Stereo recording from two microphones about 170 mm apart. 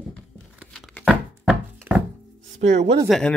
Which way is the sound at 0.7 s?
5° left (ahead or behind).